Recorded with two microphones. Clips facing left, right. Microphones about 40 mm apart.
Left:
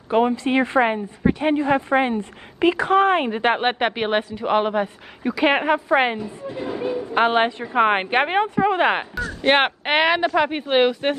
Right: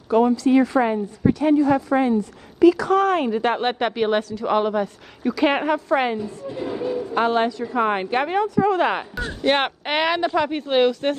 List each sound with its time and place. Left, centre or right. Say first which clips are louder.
0.1 s a woman's voice: right 2 dB; left; by 6.8 s centre
6.8 s a sound: even; centre
7.2 s a woman's voice: left 2 dB; left